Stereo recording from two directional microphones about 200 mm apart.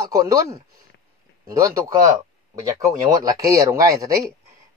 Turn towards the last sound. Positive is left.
turn(degrees=-15)  # may be behind; listen again after turning